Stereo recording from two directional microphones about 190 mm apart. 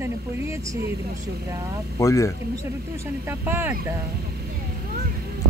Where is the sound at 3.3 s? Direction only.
10° right (ahead or behind).